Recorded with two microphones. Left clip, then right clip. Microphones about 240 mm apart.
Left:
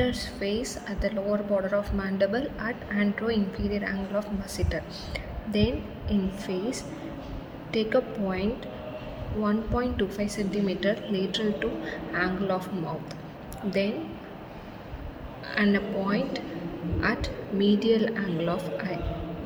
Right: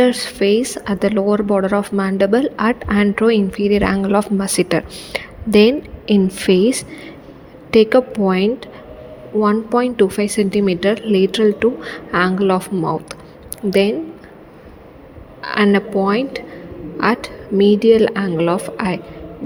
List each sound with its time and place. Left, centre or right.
0.0 s speech: right
15.4 s speech: right